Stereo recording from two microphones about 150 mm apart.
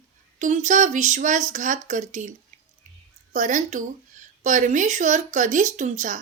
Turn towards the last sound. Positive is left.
turn(degrees=-55)  # may be behind; listen again after turning